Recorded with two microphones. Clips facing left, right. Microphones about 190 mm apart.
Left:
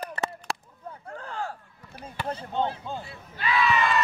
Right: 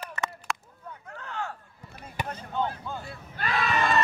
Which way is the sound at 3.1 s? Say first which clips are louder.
Left 3 dB; 45° right (ahead or behind).